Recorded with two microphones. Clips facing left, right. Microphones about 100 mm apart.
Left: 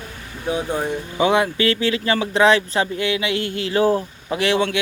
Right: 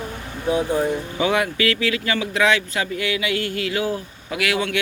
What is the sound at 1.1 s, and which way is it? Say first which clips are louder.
Speech: left 5 dB; 25° left (ahead or behind).